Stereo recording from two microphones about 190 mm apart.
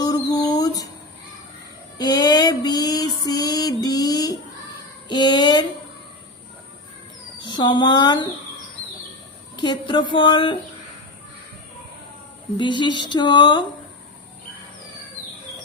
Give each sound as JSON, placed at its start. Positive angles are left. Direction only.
{"t": 0.0, "sound": "a sound", "side_deg": 20}
{"t": 2.0, "sound": "female singing", "side_deg": 20}
{"t": 5.0, "sound": "a sound", "side_deg": 25}
{"t": 7.4, "sound": "speech", "side_deg": 25}
{"t": 9.6, "sound": "speech", "side_deg": 25}
{"t": 12.5, "sound": "speech", "side_deg": 25}